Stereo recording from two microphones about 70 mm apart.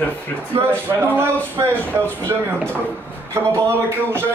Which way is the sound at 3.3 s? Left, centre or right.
Right.